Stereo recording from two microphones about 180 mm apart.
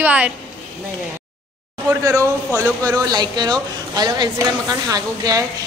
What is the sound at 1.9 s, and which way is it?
Speech, 15° right (ahead or behind).